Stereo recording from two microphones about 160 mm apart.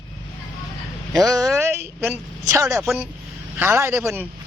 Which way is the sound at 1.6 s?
15° right (ahead or behind).